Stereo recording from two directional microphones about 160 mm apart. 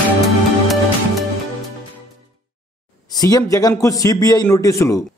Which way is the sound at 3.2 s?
20° left (ahead or behind).